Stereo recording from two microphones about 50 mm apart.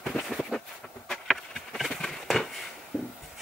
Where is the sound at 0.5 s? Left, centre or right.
Centre.